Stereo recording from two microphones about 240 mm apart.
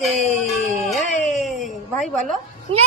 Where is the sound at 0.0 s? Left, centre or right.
Centre.